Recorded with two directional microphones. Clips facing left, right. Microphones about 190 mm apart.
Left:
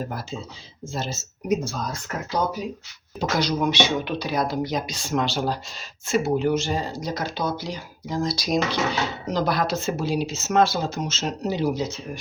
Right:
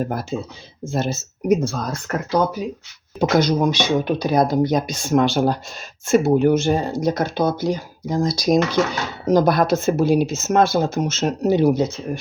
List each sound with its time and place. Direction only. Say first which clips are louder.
0.1 s speech: right 7 dB; 55° right (ahead or behind)
3.2 s speech: right 6 dB; 50° right (ahead or behind)